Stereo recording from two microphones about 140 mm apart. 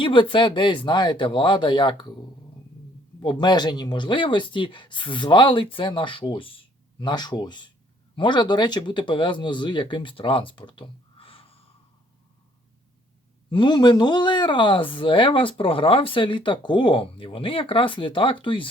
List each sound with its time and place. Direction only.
0.0 s speech: 35° left (ahead or behind)
3.2 s speech: 35° left (ahead or behind)
13.5 s speech: 35° left (ahead or behind)